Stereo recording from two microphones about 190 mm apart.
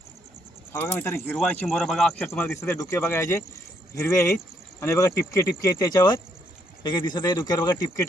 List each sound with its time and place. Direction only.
0.7 s speech: 10° left (ahead or behind)
1.6 s speech: centre (ahead or behind)
2.4 s speech: 15° left (ahead or behind)